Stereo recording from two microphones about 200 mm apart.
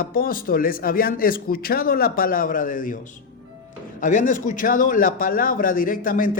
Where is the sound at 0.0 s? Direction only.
45° left (ahead or behind).